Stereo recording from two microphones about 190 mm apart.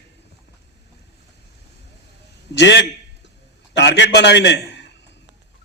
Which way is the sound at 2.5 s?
65° left (ahead or behind).